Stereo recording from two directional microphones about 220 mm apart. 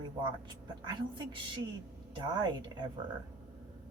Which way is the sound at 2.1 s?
20° right (ahead or behind).